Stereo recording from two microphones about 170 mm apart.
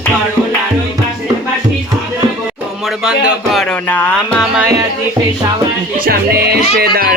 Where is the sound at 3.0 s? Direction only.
Centre (ahead or behind).